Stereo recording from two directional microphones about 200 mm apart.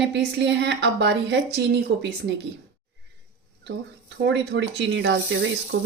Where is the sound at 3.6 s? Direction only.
60° right (ahead or behind).